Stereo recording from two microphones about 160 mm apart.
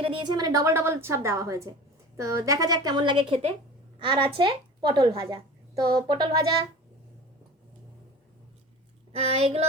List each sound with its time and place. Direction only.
0.0 s a woman's voice: 30° right (ahead or behind)
9.1 s speech: 40° right (ahead or behind)